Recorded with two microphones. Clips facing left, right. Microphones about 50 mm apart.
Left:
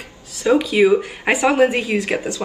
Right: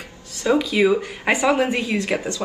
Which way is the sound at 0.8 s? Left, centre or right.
Centre.